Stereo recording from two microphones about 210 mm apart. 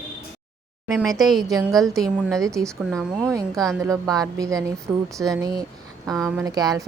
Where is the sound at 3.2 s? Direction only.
15° right (ahead or behind).